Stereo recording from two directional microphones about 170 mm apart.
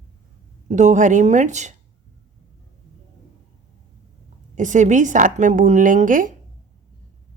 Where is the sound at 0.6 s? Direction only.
45° right (ahead or behind).